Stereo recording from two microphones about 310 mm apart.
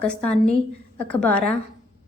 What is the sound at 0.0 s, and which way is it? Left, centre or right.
A woman's voice, centre.